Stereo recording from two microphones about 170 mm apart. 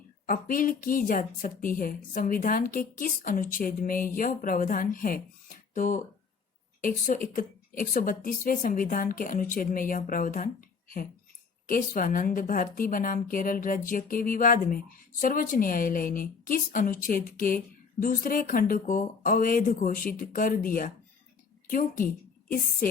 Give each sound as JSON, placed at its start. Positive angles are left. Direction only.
{"t": 0.3, "sound": "a woman's voice", "side_deg": 55}